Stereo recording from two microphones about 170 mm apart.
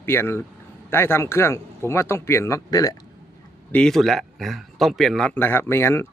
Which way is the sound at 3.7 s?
5° left (ahead or behind).